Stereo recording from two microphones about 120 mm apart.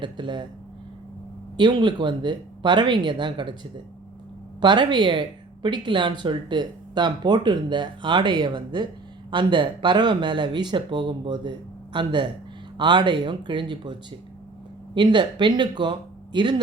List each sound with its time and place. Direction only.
0.0 s speech: 40° right (ahead or behind)
1.5 s speech: 40° right (ahead or behind)
4.6 s speech: 40° right (ahead or behind)